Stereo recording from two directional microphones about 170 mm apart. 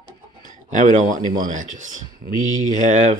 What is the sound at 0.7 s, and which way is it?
Speech, 45° right (ahead or behind).